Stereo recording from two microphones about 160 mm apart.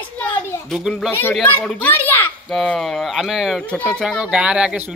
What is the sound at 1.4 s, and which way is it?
Speech, 10° left (ahead or behind).